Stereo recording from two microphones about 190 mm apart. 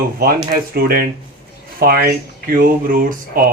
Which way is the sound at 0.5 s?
55° right (ahead or behind).